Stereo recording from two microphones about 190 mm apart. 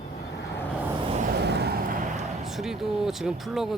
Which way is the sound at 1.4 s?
60° right (ahead or behind).